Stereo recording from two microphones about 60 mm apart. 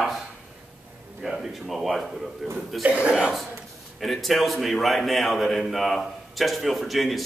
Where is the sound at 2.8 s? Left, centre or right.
Right.